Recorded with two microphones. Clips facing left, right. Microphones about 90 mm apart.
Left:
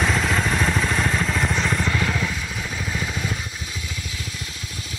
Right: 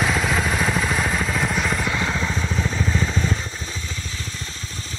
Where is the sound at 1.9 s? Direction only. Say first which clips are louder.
Right 1 dB; 15° right (ahead or behind).